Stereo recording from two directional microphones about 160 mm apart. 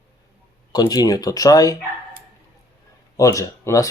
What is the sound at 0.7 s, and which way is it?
Speech, 25° left (ahead or behind).